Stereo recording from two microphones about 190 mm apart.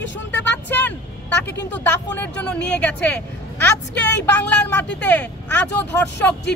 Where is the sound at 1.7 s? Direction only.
10° left (ahead or behind).